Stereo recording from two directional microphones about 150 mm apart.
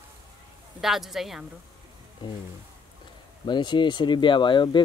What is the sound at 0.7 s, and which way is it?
Speech, centre (ahead or behind).